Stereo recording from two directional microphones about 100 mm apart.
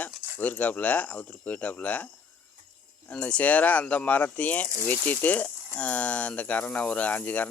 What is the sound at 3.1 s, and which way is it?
Speech, 10° left (ahead or behind).